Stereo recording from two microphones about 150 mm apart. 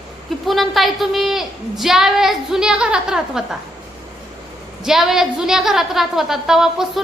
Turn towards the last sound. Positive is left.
turn(degrees=-5)  # may be behind; listen again after turning